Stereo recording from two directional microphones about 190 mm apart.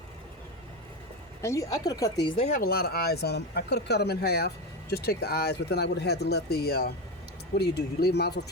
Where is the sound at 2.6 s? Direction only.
55° left (ahead or behind).